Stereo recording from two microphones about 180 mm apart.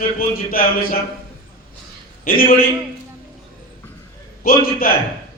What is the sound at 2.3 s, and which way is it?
Speech, 55° left (ahead or behind).